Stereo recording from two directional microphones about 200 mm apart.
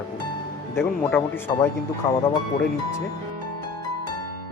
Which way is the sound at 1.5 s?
20° left (ahead or behind).